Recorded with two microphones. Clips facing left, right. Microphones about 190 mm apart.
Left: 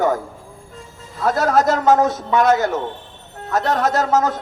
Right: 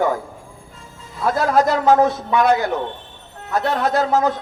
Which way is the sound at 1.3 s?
45° left (ahead or behind).